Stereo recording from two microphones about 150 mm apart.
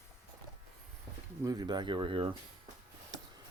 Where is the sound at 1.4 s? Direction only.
25° right (ahead or behind).